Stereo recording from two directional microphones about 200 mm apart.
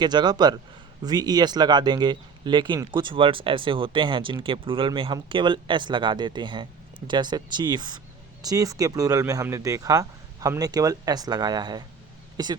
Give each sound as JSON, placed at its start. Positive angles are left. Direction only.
{"t": 0.0, "sound": "speech", "side_deg": -20}